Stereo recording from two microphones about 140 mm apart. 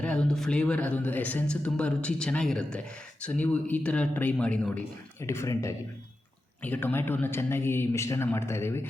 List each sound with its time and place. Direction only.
0.0 s speech: 10° left (ahead or behind)
5.2 s speech: 20° left (ahead or behind)